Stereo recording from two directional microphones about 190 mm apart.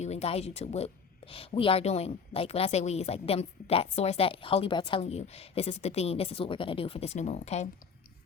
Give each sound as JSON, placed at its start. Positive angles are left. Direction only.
{"t": 0.0, "sound": "speech", "side_deg": 35}